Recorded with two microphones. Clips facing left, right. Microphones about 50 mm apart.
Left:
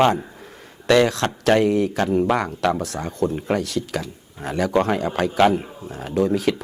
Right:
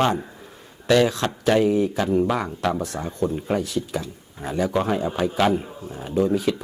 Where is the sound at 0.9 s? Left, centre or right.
Left.